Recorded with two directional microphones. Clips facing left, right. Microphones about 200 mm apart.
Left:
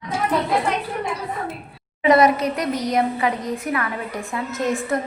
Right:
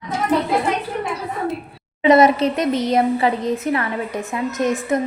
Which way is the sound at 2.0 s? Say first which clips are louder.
Right 3 dB; 25° right (ahead or behind).